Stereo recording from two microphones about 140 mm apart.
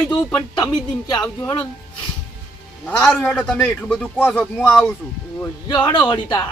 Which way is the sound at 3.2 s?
5° left (ahead or behind).